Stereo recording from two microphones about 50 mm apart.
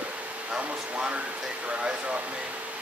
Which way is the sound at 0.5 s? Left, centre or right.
Right.